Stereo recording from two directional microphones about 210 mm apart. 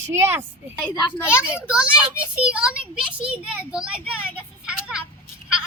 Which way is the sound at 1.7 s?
5° right (ahead or behind).